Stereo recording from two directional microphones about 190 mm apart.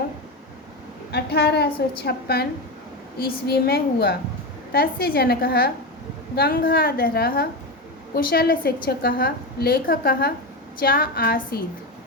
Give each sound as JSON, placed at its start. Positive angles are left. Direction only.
{"t": 1.1, "sound": "a woman's voice", "side_deg": 60}